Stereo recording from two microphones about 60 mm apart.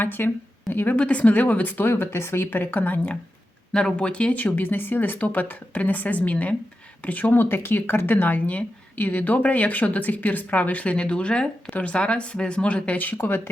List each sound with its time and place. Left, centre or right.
0.0 s speech: left
3.7 s speech: centre; by 7.4 s left
7.4 s speech: left
13.1 s speech: left